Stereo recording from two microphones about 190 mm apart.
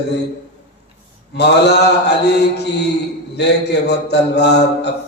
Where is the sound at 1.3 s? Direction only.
60° left (ahead or behind).